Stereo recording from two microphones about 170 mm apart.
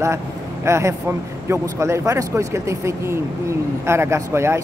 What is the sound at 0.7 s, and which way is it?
Speech, 15° right (ahead or behind).